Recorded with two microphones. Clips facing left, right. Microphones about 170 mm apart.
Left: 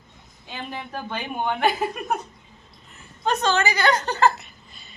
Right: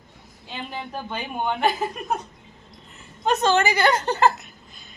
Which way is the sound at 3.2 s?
25° right (ahead or behind).